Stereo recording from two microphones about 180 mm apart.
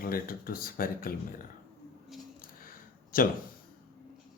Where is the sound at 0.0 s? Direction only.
55° left (ahead or behind).